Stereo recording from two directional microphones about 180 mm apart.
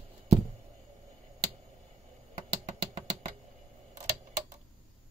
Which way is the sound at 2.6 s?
20° right (ahead or behind).